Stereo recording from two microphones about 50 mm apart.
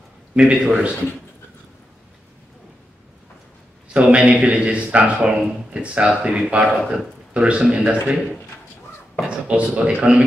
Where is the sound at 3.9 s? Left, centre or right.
Right.